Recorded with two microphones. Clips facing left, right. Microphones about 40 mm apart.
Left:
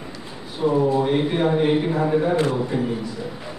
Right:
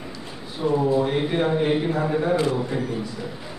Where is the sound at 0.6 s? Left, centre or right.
Centre.